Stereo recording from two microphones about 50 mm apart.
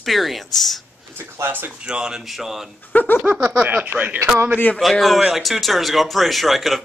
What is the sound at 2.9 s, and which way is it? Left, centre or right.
Speech, left.